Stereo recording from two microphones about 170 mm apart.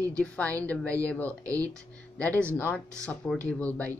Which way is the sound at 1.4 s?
20° right (ahead or behind).